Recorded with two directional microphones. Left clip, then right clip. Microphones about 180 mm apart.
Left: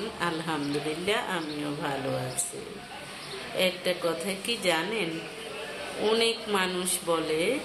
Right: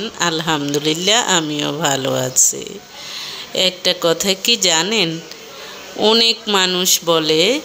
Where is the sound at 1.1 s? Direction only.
60° right (ahead or behind).